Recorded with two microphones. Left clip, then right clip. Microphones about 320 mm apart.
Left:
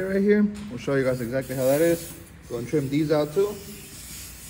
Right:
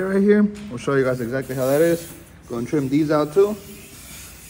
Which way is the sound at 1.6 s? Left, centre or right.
Centre.